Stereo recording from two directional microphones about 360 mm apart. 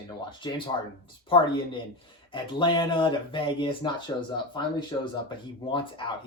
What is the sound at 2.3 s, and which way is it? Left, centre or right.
Speech, centre.